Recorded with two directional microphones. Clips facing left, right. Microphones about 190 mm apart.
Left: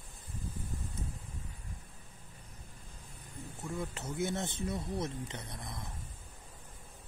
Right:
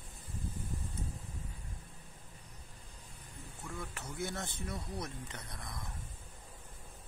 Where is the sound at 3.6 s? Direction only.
20° left (ahead or behind).